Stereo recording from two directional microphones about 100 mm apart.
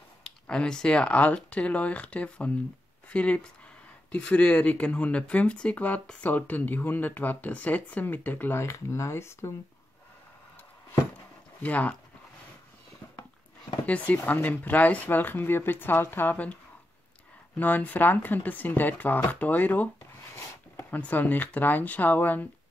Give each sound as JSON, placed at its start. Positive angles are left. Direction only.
{"t": 0.2, "sound": "speech", "side_deg": 10}
{"t": 11.6, "sound": "speech", "side_deg": 15}
{"t": 13.8, "sound": "speech", "side_deg": 15}
{"t": 17.6, "sound": "speech", "side_deg": 15}